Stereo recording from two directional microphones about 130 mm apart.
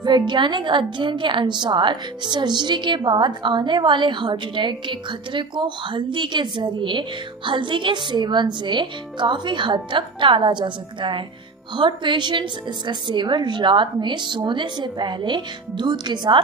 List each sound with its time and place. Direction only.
0.0 s a woman's voice: 35° right (ahead or behind)